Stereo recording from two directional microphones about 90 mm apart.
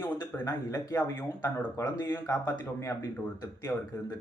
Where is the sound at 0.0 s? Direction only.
20° left (ahead or behind).